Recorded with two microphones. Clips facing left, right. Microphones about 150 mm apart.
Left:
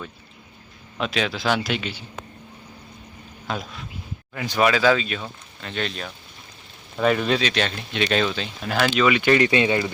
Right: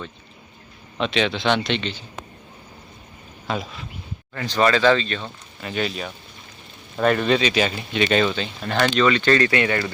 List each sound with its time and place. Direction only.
0.9 s speech: 5° left (ahead or behind)
3.4 s speech: centre (ahead or behind)
4.4 s speech: 10° left (ahead or behind)
5.5 s speech: 5° right (ahead or behind); by 9.9 s 20° left (ahead or behind)